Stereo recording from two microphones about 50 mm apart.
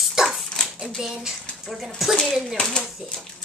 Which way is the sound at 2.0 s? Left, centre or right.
Centre.